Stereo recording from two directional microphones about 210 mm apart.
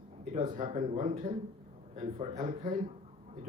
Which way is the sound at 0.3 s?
35° right (ahead or behind).